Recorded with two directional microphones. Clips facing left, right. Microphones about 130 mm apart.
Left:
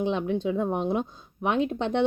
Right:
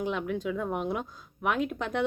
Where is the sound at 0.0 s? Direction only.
25° left (ahead or behind).